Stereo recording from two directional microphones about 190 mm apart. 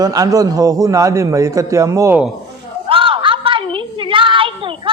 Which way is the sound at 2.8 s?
25° right (ahead or behind).